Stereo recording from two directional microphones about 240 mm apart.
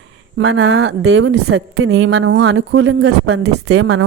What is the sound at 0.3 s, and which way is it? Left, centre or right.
A woman's voice, right.